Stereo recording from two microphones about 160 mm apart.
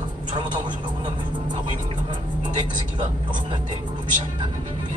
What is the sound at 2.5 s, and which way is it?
A man's voice, 30° right (ahead or behind).